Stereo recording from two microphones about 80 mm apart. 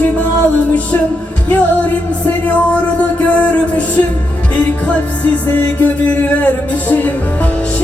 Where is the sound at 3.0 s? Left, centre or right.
Centre.